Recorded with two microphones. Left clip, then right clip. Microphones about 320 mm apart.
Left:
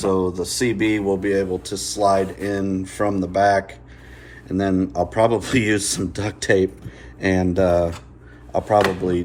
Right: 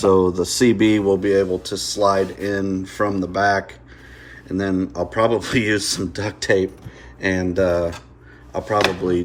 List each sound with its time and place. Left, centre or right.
0.3 s speech: right